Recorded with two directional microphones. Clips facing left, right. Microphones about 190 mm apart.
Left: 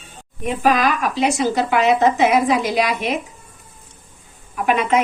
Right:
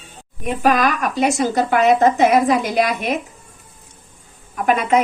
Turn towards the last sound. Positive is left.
turn(degrees=-40)  # may be behind; listen again after turning